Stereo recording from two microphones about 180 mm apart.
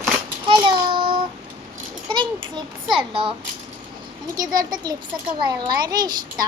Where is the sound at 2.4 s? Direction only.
30° right (ahead or behind).